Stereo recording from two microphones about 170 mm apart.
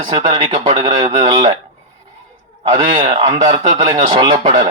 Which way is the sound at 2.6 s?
30° right (ahead or behind).